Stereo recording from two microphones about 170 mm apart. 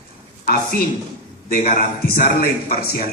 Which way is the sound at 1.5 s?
55° left (ahead or behind).